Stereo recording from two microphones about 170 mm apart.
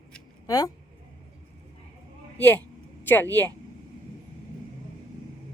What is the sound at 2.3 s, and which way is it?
A woman's voice, 10° left (ahead or behind).